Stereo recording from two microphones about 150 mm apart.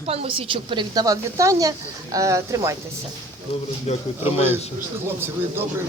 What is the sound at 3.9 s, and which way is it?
Speech, 45° left (ahead or behind).